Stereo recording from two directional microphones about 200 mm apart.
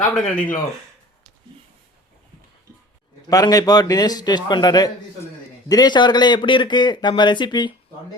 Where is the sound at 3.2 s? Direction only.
20° left (ahead or behind).